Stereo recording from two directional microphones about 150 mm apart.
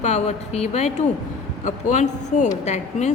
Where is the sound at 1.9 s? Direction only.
50° left (ahead or behind).